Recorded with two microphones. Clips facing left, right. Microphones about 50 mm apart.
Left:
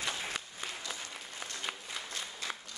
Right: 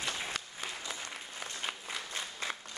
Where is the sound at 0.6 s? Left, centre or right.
Centre.